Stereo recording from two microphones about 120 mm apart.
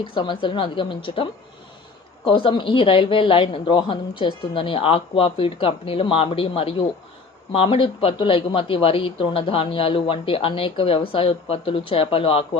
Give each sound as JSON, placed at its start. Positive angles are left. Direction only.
{"t": 0.0, "sound": "speech", "side_deg": 40}